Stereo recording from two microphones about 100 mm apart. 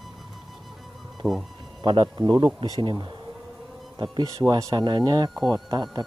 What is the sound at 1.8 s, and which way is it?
Speech, 50° right (ahead or behind).